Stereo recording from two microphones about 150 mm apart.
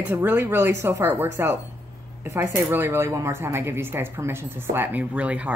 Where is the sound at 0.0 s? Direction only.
15° right (ahead or behind).